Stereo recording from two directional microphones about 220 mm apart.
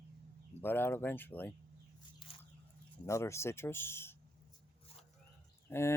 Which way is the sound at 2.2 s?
25° left (ahead or behind).